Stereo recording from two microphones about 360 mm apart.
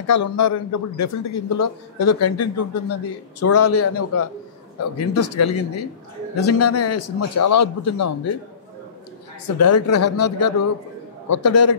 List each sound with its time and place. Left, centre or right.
0.0 s a man's voice: left
9.6 s a man's voice: left